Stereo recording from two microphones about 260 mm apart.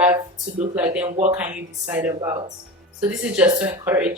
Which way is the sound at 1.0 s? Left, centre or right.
Right.